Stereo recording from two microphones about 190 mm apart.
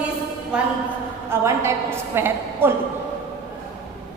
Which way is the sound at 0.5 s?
5° right (ahead or behind).